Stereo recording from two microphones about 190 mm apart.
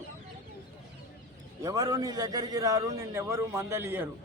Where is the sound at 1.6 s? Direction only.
20° right (ahead or behind).